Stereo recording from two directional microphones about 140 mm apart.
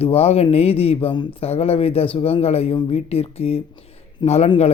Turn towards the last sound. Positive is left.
turn(degrees=50)  # may be behind; listen again after turning